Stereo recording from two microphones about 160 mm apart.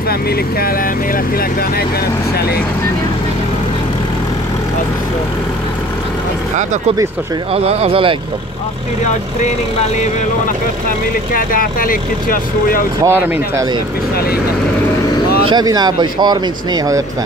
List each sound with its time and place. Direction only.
7.5 s speech: 40° right (ahead or behind)
9.0 s speech: 45° left (ahead or behind)
11.3 s speech: 60° left (ahead or behind)
13.0 s speech: 20° right (ahead or behind)
15.4 s speech: 25° right (ahead or behind)